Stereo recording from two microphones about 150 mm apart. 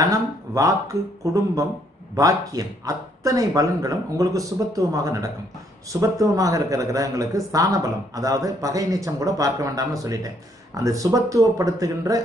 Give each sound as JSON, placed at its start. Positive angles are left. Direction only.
{"t": 0.0, "sound": "a man's voice", "side_deg": -25}